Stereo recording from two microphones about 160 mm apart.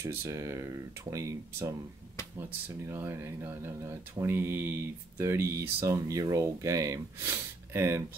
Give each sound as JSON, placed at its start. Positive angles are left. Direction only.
{"t": 0.0, "sound": "speech", "side_deg": -15}
{"t": 2.9, "sound": "speech", "side_deg": -15}